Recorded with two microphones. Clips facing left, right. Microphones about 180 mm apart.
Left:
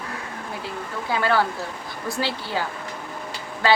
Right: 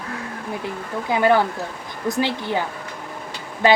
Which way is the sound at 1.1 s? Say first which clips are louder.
Right 4 dB; 20° right (ahead or behind).